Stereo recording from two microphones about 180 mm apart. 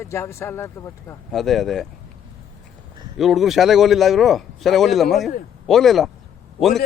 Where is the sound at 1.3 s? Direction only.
Centre (ahead or behind).